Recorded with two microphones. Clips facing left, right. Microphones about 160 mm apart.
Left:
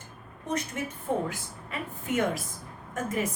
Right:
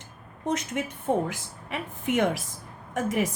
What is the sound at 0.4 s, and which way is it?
Speech, 80° right.